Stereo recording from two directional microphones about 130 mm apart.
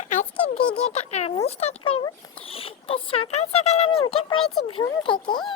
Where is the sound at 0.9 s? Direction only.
55° left (ahead or behind).